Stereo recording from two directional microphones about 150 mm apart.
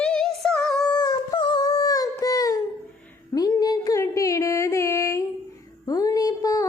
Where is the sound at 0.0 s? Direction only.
5° left (ahead or behind).